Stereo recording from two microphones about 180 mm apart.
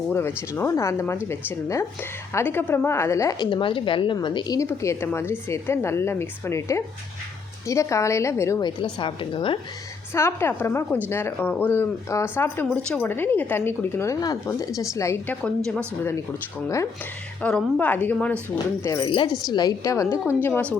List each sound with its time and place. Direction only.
0.1 s a woman's voice: 10° left (ahead or behind)
8.8 s a woman's voice: 30° left (ahead or behind)
10.2 s a woman's voice: 15° left (ahead or behind)
15.4 s a woman's voice: 5° left (ahead or behind)
17.4 s a woman's voice: 10° left (ahead or behind)